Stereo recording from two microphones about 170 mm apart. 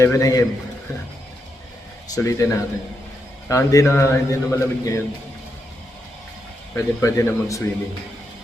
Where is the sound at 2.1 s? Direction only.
20° left (ahead or behind).